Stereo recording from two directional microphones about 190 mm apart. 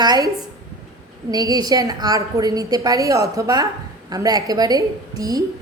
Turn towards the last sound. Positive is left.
turn(degrees=-20)  # may be behind; listen again after turning